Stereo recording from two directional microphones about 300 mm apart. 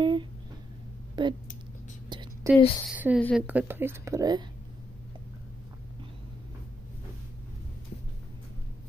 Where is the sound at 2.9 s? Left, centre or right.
Centre.